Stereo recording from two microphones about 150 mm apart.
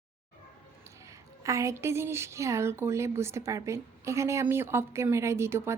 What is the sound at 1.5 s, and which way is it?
A woman's voice, 20° right (ahead or behind).